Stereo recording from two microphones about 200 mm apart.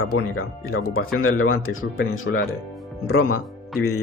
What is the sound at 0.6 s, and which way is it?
Speech, 90° left.